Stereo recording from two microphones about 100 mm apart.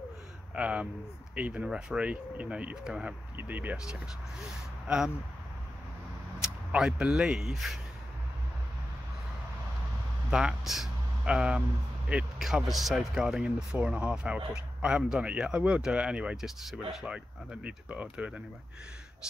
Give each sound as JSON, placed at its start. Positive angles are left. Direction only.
{"t": 0.6, "sound": "speech", "side_deg": -15}
{"t": 6.4, "sound": "speech", "side_deg": -10}
{"t": 10.3, "sound": "a man's voice", "side_deg": -5}